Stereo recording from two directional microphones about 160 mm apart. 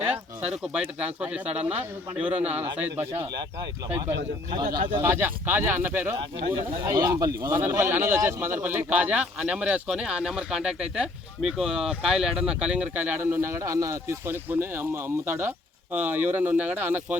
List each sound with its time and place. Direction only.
0.0 s bird: 5° right (ahead or behind)
0.9 s speech: 10° right (ahead or behind)
4.9 s speech: 15° right (ahead or behind)